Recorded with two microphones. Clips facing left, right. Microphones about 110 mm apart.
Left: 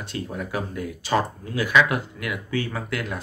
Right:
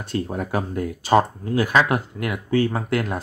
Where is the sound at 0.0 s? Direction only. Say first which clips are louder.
Right 5 dB; 45° right (ahead or behind).